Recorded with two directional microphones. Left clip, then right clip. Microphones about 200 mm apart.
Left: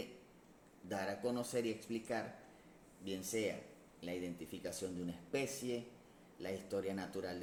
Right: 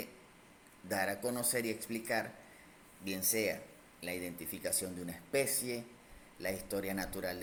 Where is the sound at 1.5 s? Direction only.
40° right (ahead or behind).